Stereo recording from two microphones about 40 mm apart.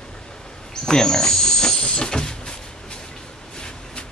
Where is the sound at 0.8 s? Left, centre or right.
Centre.